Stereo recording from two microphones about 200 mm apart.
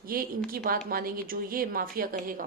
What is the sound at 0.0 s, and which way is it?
Speech, 45° right (ahead or behind).